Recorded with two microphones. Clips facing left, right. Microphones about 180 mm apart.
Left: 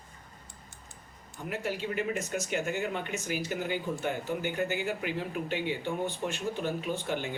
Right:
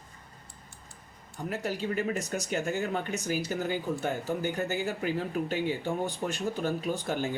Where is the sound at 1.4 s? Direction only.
40° right (ahead or behind).